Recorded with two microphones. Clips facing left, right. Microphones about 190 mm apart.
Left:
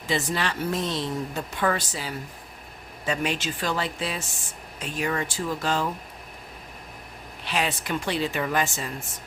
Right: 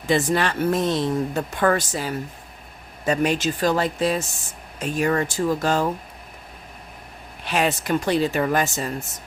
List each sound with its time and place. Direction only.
0.1 s speech: 50° right (ahead or behind)
7.4 s speech: 50° right (ahead or behind)